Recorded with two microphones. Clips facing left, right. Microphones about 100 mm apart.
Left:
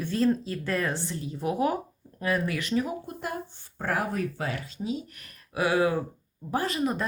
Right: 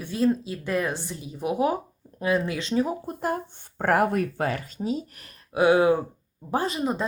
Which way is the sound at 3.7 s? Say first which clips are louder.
Right 7 dB; 55° right (ahead or behind).